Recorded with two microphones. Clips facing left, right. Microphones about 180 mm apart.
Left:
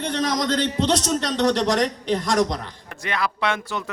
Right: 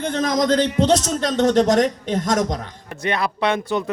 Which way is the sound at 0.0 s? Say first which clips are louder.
Right 3 dB; 45° right (ahead or behind).